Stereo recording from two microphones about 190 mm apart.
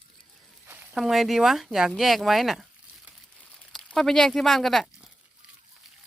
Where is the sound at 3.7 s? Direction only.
Centre (ahead or behind).